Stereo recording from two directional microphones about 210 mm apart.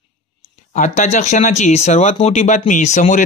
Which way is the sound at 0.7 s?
35° left (ahead or behind).